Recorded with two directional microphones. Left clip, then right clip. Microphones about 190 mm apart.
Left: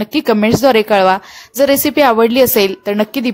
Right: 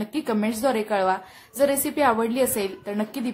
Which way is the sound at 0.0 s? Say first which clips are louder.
Left 13 dB; 45° left (ahead or behind).